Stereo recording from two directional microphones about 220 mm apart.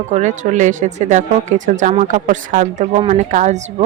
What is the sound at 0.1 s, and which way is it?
Speech, 35° right (ahead or behind).